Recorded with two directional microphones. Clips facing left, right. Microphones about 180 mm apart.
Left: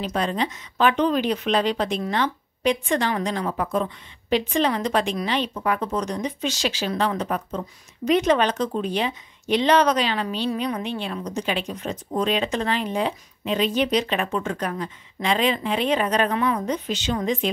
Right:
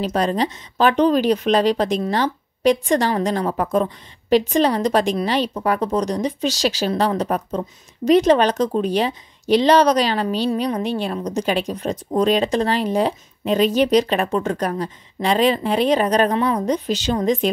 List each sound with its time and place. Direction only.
0.1 s a woman's voice: 40° right (ahead or behind)